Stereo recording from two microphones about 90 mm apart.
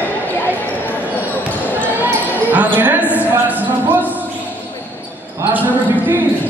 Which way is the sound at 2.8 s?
20° right (ahead or behind).